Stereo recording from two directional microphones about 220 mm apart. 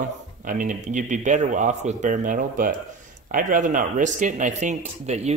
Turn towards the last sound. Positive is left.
turn(degrees=-30)  # may be behind; listen again after turning